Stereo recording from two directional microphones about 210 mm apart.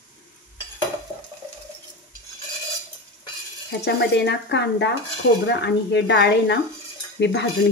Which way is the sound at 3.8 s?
55° left (ahead or behind).